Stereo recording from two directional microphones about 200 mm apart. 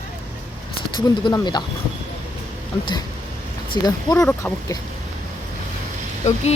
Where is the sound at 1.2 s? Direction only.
20° left (ahead or behind).